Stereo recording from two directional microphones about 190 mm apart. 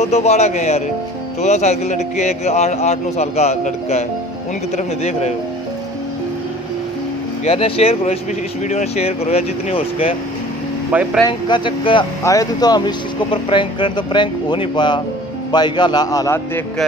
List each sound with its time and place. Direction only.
0.0 s a man's voice: 35° left (ahead or behind)
7.4 s a man's voice: 30° left (ahead or behind)
10.9 s speech: 5° right (ahead or behind)
11.2 s speech: 25° left (ahead or behind)